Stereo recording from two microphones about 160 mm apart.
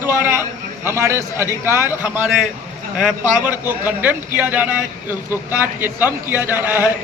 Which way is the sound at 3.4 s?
10° right (ahead or behind).